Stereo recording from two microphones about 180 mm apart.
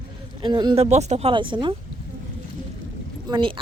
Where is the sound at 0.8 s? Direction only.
35° right (ahead or behind).